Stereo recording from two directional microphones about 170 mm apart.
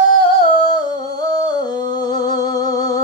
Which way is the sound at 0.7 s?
20° left (ahead or behind).